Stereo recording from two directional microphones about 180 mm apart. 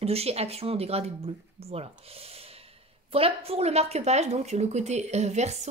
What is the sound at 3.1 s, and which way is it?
Speech, 30° right (ahead or behind).